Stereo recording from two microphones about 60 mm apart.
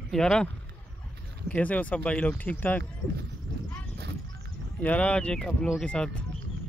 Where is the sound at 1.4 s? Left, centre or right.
Left.